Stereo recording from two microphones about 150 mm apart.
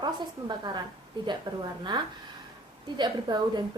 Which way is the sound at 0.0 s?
30° right (ahead or behind).